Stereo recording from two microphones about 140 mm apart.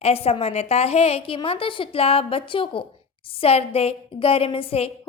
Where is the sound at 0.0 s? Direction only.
45° left (ahead or behind).